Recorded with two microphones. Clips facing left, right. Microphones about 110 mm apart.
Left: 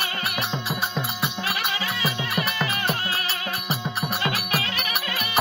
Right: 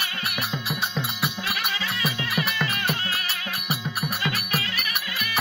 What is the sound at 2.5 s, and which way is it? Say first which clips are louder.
Music: left 1 dB; 15° left (ahead or behind).